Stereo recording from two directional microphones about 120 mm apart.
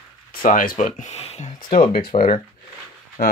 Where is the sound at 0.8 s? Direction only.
80° left.